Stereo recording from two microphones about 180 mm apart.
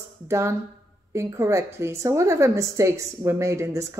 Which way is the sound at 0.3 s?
15° right (ahead or behind).